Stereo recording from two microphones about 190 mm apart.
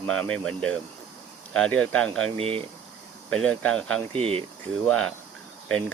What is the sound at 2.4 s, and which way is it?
Speech, 30° right (ahead or behind).